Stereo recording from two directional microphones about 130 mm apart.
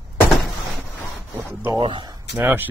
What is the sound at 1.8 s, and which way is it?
Speech, 40° right (ahead or behind).